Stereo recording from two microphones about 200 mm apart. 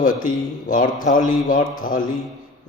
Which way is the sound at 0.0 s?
45° left (ahead or behind).